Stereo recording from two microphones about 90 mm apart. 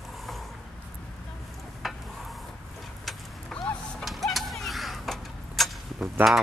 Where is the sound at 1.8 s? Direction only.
Centre (ahead or behind).